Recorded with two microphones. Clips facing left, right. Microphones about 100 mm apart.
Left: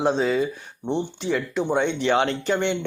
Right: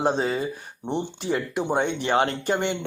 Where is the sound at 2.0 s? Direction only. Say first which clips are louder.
Left 1 dB; 40° right (ahead or behind).